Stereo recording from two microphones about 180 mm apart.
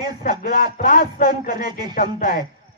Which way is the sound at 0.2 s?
50° left (ahead or behind).